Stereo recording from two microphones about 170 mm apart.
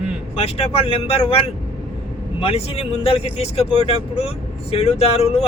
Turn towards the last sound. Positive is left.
turn(degrees=35)  # may be behind; listen again after turning